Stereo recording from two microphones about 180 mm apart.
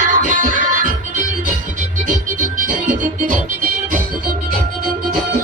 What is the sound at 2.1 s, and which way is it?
Music, 45° right (ahead or behind).